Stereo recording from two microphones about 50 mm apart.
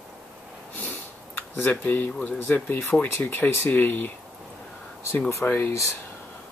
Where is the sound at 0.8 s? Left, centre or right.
Left.